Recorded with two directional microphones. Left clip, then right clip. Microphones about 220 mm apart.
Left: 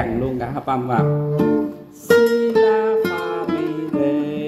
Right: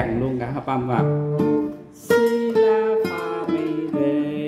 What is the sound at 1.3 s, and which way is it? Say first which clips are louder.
Music: left 2 dB; 45° left (ahead or behind).